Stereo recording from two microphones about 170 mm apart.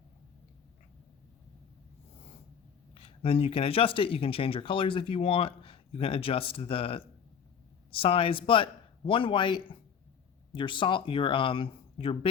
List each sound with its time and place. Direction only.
2.9 s a man's voice: 35° left (ahead or behind)